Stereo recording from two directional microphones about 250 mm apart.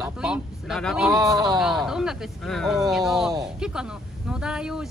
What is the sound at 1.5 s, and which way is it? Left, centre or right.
Speech, centre.